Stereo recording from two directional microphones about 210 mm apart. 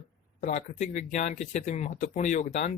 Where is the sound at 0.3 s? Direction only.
35° left (ahead or behind).